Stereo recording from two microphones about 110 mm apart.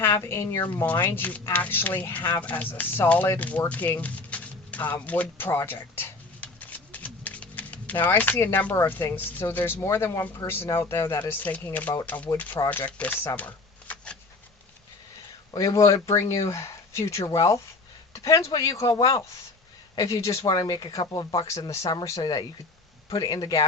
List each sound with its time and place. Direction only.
0.2 s a woman's voice: 20° left (ahead or behind)
2.3 s a sound: 15° left (ahead or behind)
8.0 s a woman's voice: 15° left (ahead or behind)
15.5 s speech: 30° left (ahead or behind)